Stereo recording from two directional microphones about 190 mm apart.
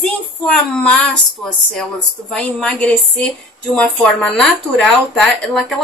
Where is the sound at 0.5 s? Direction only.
5° left (ahead or behind).